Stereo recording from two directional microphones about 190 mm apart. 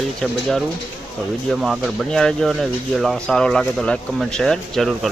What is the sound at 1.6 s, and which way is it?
Speech, centre (ahead or behind).